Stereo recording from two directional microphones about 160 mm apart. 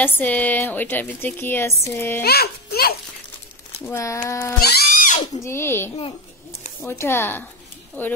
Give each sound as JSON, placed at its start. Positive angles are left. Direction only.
{"t": 0.0, "sound": "a woman's voice", "side_deg": 10}
{"t": 2.2, "sound": "a child's voice", "side_deg": 75}
{"t": 3.8, "sound": "speech", "side_deg": 20}
{"t": 4.6, "sound": "speech", "side_deg": 75}
{"t": 5.4, "sound": "a woman's voice", "side_deg": 15}